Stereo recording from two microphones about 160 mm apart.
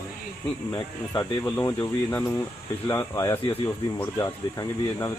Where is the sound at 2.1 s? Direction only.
15° left (ahead or behind).